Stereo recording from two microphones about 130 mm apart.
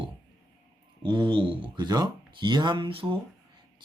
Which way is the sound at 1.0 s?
40° right (ahead or behind).